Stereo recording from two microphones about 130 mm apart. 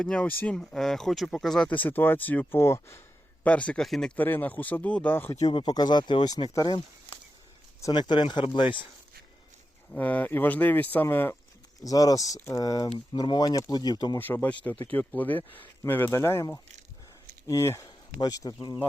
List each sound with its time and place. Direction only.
0.0 s speech: 5° left (ahead or behind)
3.4 s speech: 10° left (ahead or behind)
5.4 s speech: 35° left (ahead or behind)
9.9 s speech: 10° left (ahead or behind); by 14.2 s 30° left (ahead or behind)
14.2 s speech: 15° left (ahead or behind)